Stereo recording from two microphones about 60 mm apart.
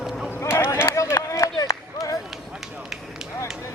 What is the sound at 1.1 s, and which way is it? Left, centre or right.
Run, left.